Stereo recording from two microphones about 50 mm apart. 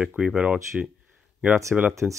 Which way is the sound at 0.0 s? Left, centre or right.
Right.